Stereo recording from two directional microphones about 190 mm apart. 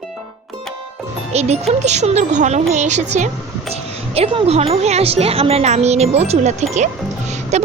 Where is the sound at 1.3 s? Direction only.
35° right (ahead or behind).